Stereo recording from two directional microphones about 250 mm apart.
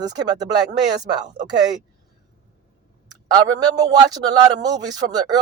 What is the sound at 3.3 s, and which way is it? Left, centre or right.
Speech, centre.